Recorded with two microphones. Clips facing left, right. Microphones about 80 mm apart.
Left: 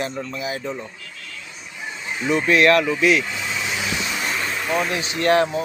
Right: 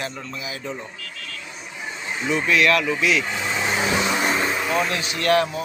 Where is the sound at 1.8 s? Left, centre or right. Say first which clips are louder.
Even; right.